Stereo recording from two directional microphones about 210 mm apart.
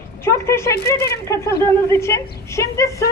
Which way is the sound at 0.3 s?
15° left (ahead or behind).